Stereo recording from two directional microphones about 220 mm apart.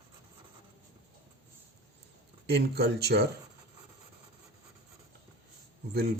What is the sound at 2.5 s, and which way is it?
Speech, 45° right (ahead or behind).